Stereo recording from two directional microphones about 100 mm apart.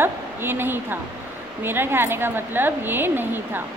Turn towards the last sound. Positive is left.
turn(degrees=-20)  # may be behind; listen again after turning